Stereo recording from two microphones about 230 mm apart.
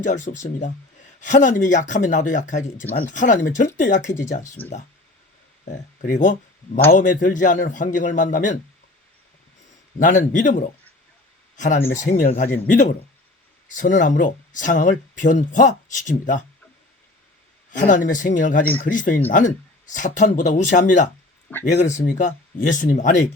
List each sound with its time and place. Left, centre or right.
0.0 s speech: left
6.1 s speech: left
10.0 s speech: left
17.7 s speech: left